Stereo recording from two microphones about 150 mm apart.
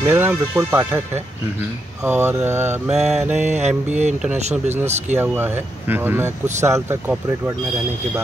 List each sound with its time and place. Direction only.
0.0 s speech: 15° right (ahead or behind)
2.9 s mantra: 5° right (ahead or behind)
3.3 s music: 50° right (ahead or behind)
5.1 s speech: 15° right (ahead or behind)
6.2 s music: 50° right (ahead or behind)
6.6 s speech: 15° right (ahead or behind)